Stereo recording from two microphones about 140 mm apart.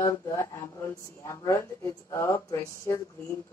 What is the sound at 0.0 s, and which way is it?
Speech, 20° left (ahead or behind).